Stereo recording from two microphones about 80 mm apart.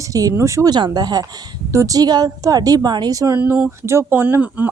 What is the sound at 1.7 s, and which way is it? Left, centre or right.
A woman's voice, right.